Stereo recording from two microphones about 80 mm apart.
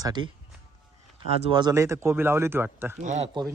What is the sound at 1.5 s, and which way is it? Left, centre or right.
Speech, right.